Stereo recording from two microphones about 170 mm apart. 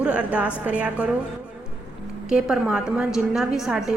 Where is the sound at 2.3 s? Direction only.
5° right (ahead or behind).